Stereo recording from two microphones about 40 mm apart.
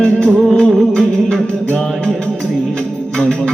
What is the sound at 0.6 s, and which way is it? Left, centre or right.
Music, centre.